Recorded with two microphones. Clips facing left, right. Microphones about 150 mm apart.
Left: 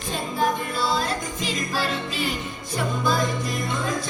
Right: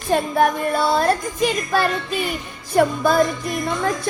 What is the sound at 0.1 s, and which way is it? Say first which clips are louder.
Music: right 7 dB; 60° right (ahead or behind).